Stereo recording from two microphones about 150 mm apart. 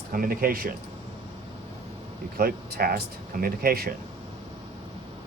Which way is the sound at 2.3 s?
80° right.